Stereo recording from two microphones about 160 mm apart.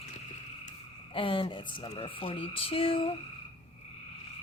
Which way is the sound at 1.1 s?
35° left (ahead or behind).